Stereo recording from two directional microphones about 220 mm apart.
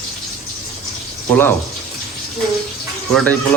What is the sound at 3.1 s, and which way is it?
Speech, 5° left (ahead or behind).